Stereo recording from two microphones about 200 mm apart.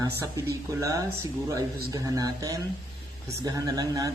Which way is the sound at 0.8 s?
15° right (ahead or behind).